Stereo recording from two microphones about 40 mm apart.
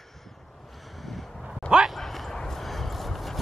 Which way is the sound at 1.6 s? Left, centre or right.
Right.